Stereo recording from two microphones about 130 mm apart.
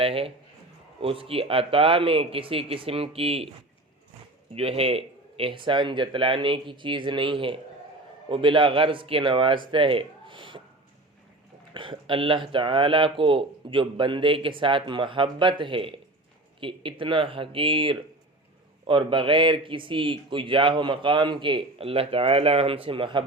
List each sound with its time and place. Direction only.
0.0 s speech: 45° right (ahead or behind)
4.5 s a man's voice: 50° right (ahead or behind)
11.7 s a man's voice: 40° right (ahead or behind)